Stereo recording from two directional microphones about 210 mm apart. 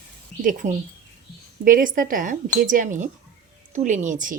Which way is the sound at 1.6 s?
40° right (ahead or behind).